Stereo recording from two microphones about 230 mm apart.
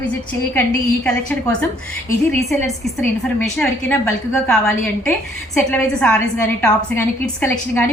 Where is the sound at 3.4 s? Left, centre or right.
Centre.